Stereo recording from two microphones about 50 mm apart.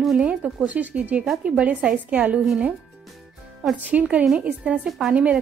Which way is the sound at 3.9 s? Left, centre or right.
Right.